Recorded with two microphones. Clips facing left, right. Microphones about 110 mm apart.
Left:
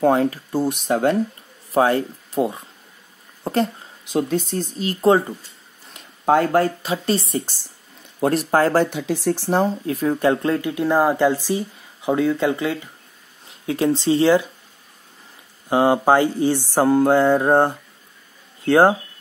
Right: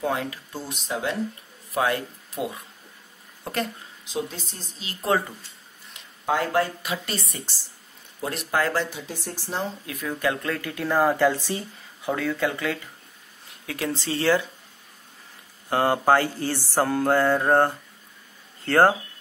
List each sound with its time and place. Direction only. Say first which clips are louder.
0.0 s speech: left 10 dB; 40° left (ahead or behind)
0.6 s speech: left 11 dB; 60° left (ahead or behind)
1.7 s speech: left 7 dB; 35° left (ahead or behind)
4.0 s speech: left 10 dB; 60° left (ahead or behind)
6.2 s speech: left 7 dB; 50° left (ahead or behind)
6.8 s speech: left 9 dB; 30° left (ahead or behind)
8.3 s speech: left 8 dB; 40° left (ahead or behind)
8.9 s speech: left 13 dB; 80° left
9.8 s speech: left 8 dB; 35° left (ahead or behind); by 11.6 s 10° left (ahead or behind)
12.0 s speech: left 6 dB; 20° left (ahead or behind)
15.7 s music: left 4 dB; 15° left (ahead or behind)
18.6 s speech: left 4 dB; 15° left (ahead or behind)